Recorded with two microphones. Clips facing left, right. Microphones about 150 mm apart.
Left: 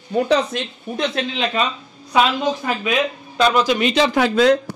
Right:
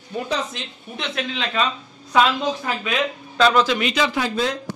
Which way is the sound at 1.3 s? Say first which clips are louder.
Left 3 dB; 20° left (ahead or behind).